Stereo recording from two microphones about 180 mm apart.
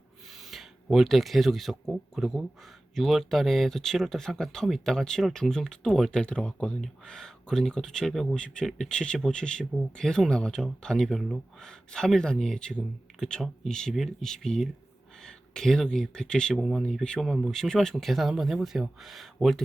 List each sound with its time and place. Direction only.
0.5 s speech: centre (ahead or behind)